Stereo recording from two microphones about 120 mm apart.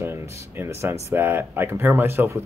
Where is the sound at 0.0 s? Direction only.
20° right (ahead or behind).